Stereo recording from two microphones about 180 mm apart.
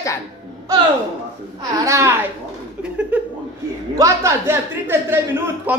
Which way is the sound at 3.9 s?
15° right (ahead or behind).